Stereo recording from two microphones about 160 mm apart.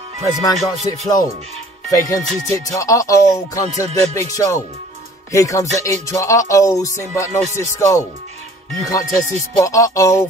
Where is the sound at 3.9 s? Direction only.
45° right (ahead or behind).